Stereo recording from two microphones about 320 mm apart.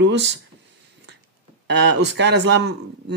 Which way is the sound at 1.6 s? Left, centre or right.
Right.